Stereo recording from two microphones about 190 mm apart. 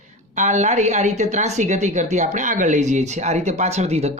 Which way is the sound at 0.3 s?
40° right (ahead or behind).